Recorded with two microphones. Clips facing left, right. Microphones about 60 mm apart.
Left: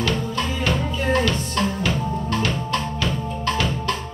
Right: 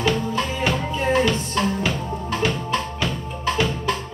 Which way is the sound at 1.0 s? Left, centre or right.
Centre.